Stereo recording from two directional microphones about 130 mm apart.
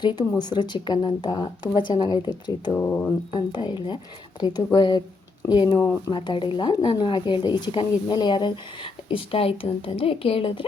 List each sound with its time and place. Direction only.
0.0 s a woman's voice: 35° left (ahead or behind)
2.7 s speech: 20° left (ahead or behind)
3.3 s a woman's voice: 35° left (ahead or behind)